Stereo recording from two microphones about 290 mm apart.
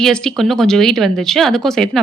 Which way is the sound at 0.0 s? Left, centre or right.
Centre.